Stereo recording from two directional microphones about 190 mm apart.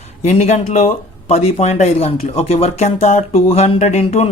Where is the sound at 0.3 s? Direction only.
35° left (ahead or behind).